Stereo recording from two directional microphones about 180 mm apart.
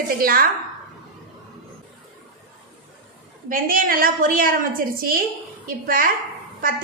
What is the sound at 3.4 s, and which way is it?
A woman's voice, 50° right (ahead or behind).